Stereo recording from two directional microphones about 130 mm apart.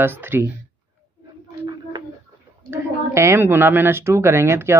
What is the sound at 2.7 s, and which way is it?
A woman's voice, 20° right (ahead or behind).